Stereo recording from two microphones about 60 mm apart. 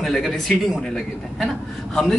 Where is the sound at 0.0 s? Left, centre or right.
Centre.